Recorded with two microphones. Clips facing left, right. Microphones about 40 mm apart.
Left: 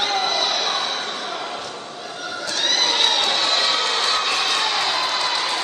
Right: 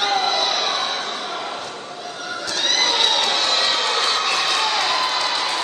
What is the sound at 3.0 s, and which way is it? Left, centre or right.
Crowd, centre.